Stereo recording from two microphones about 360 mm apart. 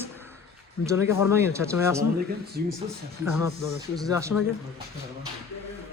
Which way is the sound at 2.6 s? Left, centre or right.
Right.